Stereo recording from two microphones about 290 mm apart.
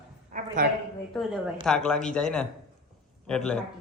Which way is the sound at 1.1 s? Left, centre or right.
Centre.